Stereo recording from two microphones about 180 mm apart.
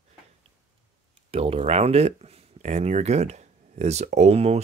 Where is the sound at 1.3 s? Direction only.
35° right (ahead or behind).